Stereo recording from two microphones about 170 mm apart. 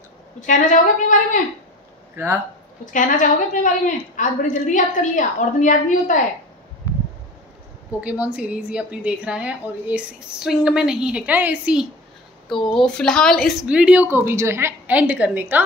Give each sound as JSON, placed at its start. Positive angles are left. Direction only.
{"t": 0.4, "sound": "a woman's voice", "side_deg": 50}
{"t": 2.2, "sound": "a woman's voice", "side_deg": -15}
{"t": 2.8, "sound": "a woman's voice", "side_deg": 50}
{"t": 8.0, "sound": "a woman's voice", "side_deg": -10}
{"t": 12.5, "sound": "speech", "side_deg": 30}
{"t": 12.8, "sound": "a woman's voice", "side_deg": 5}